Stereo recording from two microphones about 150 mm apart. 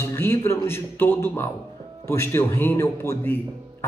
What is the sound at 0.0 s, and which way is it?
A man's voice, 15° left (ahead or behind).